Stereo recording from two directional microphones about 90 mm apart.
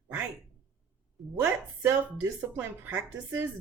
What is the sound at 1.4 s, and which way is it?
Speech, 25° right (ahead or behind).